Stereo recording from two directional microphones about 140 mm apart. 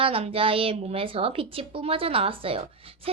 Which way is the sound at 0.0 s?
40° right (ahead or behind).